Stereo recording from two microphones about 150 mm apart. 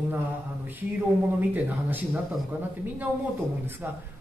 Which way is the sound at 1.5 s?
10° right (ahead or behind).